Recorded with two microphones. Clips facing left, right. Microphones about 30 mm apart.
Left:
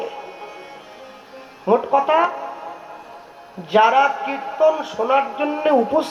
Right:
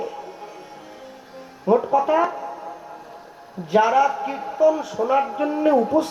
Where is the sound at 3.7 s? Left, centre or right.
Left.